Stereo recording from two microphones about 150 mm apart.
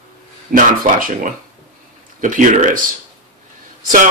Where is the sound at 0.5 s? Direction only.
60° right (ahead or behind).